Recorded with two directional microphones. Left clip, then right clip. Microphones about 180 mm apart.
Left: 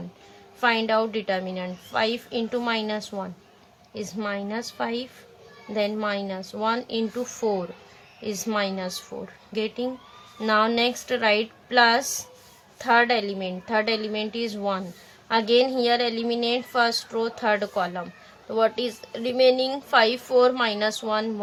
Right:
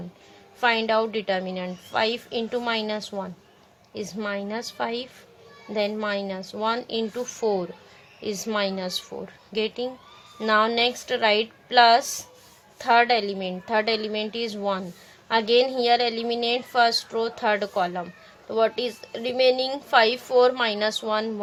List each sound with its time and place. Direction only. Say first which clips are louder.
0.6 s a woman's voice: even; 20° right (ahead or behind)